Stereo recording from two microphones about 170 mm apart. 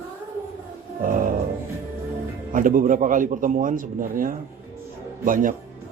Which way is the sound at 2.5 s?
55° right (ahead or behind).